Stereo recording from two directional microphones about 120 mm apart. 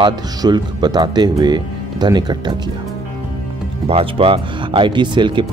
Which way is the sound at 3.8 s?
50° right (ahead or behind).